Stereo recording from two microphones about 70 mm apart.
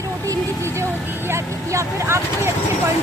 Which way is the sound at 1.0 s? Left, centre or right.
Right.